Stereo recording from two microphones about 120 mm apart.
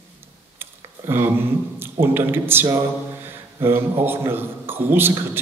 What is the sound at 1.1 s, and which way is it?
A man's voice, 20° right (ahead or behind).